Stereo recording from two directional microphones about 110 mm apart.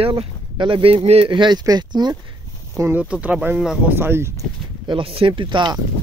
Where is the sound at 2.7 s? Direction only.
20° right (ahead or behind).